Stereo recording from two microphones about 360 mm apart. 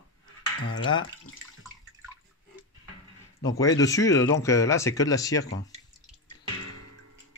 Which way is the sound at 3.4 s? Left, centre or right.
Centre.